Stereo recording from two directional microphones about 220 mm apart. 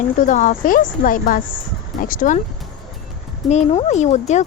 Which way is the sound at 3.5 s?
30° left (ahead or behind).